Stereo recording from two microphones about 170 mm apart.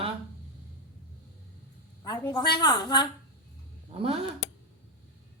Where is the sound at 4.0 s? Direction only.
35° right (ahead or behind).